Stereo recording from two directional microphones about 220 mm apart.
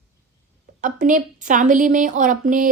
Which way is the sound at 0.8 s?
35° right (ahead or behind).